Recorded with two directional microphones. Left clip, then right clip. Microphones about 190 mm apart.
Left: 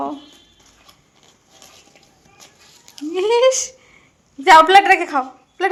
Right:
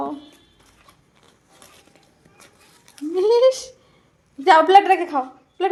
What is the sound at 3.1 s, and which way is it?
Speech, 15° left (ahead or behind).